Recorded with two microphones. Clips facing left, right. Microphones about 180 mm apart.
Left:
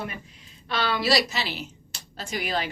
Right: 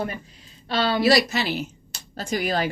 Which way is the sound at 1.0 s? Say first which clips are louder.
Right 7 dB; 55° right (ahead or behind).